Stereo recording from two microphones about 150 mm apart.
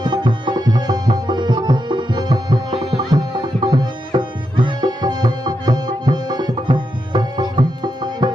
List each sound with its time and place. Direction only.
0.0 s tabla: 30° right (ahead or behind)